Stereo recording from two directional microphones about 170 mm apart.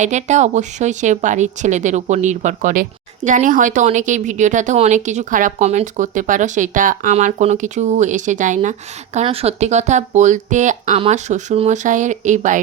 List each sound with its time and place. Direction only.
0.0 s a woman's voice: 45° right (ahead or behind)
9.2 s a woman's voice: 35° right (ahead or behind)